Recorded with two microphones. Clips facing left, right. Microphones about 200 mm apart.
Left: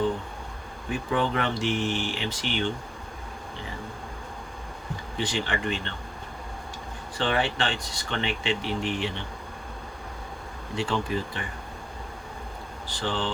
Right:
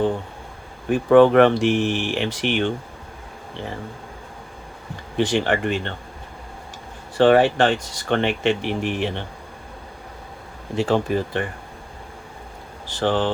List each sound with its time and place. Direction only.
0.9 s speech: 60° right (ahead or behind)
5.1 s speech: 55° right (ahead or behind)
7.2 s speech: 50° right (ahead or behind)
10.8 s speech: 55° right (ahead or behind)
13.0 s speech: 50° right (ahead or behind)